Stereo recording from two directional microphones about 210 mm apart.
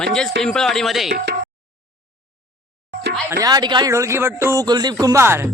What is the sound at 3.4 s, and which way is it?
A woman's voice, 20° right (ahead or behind).